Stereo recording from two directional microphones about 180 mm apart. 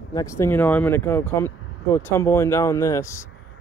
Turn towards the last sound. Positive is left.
turn(degrees=15)  # may be behind; listen again after turning